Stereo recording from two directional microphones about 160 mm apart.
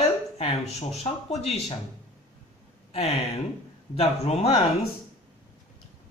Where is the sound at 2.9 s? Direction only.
40° left (ahead or behind).